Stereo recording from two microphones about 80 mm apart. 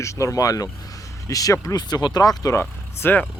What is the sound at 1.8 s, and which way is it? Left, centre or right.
Speech, left.